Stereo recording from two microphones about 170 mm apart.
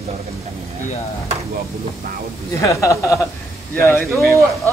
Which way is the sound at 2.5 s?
15° left (ahead or behind).